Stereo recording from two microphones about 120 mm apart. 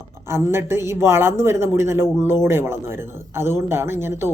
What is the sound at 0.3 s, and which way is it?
Speech, 20° right (ahead or behind).